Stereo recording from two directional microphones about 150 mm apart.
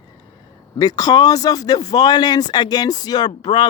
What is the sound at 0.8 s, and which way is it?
Speech, 25° left (ahead or behind).